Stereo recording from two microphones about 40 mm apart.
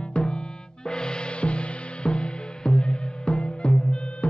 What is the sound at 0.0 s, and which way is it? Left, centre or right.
Music, left.